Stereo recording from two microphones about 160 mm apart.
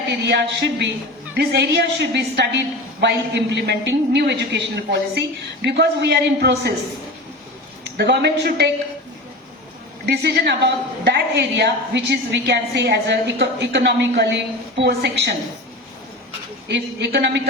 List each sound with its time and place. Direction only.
0.1 s a woman's voice: 90° right
7.9 s a woman's voice: 90° right
10.1 s a woman's voice: 90° right
16.6 s a woman's voice: 90° right